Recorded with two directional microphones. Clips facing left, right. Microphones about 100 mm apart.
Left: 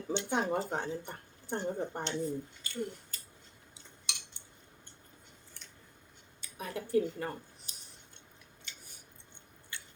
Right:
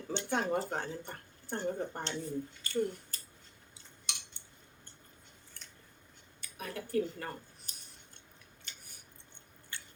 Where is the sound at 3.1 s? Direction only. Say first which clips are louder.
Right 1 dB; 35° right (ahead or behind).